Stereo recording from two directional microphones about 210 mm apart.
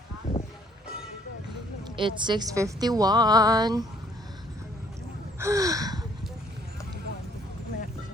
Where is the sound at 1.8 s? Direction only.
20° right (ahead or behind).